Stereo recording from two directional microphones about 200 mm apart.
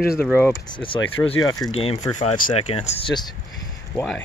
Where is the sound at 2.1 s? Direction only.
40° left (ahead or behind).